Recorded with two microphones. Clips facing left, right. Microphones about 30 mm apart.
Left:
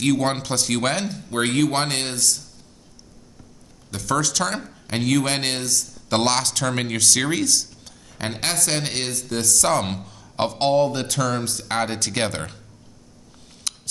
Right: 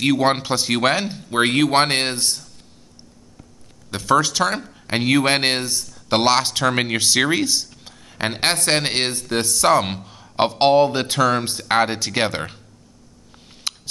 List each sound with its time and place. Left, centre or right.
0.0 s speech: right
3.9 s speech: right
13.7 s a sound: right